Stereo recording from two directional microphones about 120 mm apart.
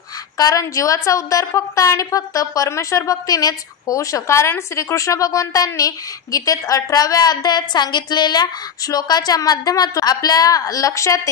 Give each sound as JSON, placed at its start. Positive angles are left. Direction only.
{"t": 0.4, "sound": "a woman's voice", "side_deg": 30}